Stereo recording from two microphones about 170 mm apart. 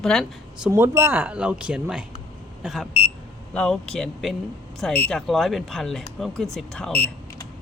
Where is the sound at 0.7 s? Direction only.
15° right (ahead or behind).